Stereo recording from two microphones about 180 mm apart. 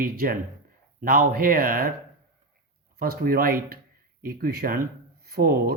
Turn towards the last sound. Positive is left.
turn(degrees=-55)  # may be behind; listen again after turning